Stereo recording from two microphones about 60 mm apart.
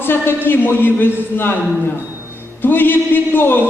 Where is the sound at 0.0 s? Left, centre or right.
Left.